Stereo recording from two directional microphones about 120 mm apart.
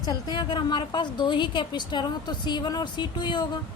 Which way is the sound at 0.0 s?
35° left (ahead or behind).